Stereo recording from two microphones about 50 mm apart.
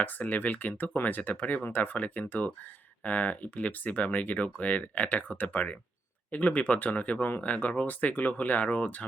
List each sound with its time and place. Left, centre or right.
0.0 s speech: left